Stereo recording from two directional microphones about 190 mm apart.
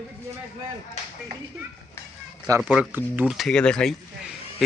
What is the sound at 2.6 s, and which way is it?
Speech, centre (ahead or behind).